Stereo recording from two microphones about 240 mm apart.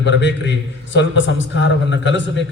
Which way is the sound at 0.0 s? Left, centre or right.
Left.